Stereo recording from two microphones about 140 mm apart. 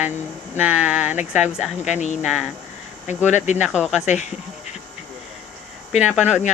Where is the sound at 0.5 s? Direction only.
10° right (ahead or behind).